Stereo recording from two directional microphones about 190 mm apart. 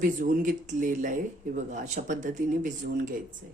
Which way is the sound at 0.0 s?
45° right (ahead or behind).